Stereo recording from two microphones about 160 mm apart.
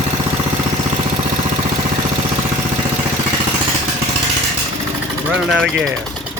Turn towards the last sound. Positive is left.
turn(degrees=-5)  # may be behind; listen again after turning